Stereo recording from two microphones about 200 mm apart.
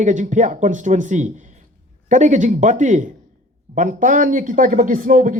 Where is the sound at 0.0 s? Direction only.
40° right (ahead or behind).